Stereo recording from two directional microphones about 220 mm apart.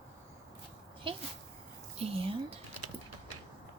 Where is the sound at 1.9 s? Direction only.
25° right (ahead or behind).